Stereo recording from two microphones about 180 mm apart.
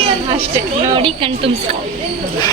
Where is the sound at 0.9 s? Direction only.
30° right (ahead or behind).